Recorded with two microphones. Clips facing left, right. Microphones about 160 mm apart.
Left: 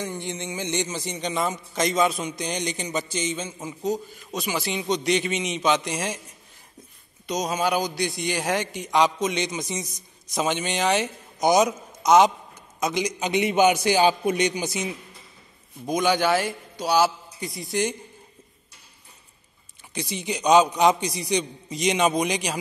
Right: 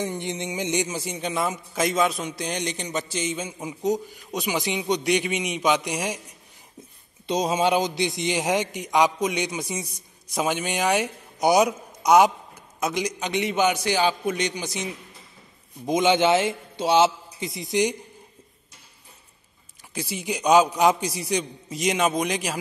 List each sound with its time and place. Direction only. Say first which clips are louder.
0.0 s a man's voice: right 2 dB; 20° right (ahead or behind)
7.2 s a man's voice: right 3 dB; 25° right (ahead or behind); by 12.3 s 10° right (ahead or behind)
12.8 s a man's voice: left 1 dB; centre (ahead or behind)
15.8 s a man's voice: right 2 dB; 20° right (ahead or behind)
19.9 s a man's voice: even; 5° right (ahead or behind)